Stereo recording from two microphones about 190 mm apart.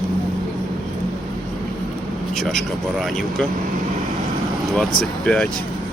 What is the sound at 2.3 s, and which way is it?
Speech, centre (ahead or behind).